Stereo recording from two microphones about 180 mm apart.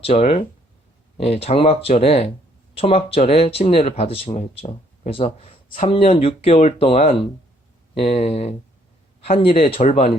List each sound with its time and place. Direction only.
0.0 s speech: 35° left (ahead or behind)